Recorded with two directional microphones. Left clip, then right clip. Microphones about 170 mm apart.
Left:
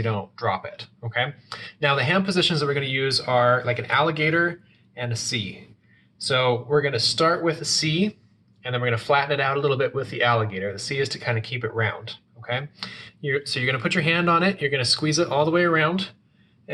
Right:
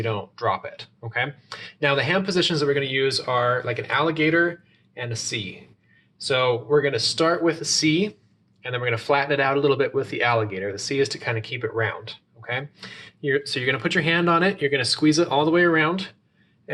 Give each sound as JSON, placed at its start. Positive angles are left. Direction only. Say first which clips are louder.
{"t": 0.0, "sound": "speech", "louder": "right 1 dB", "side_deg": -30}